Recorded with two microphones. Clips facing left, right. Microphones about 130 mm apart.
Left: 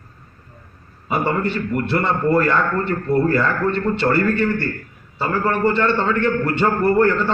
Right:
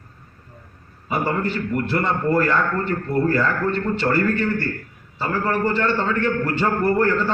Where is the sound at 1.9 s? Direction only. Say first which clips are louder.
Left 3 dB; 65° left (ahead or behind).